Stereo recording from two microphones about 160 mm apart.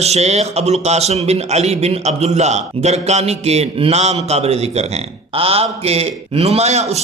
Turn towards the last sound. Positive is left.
turn(degrees=-45)  # may be behind; listen again after turning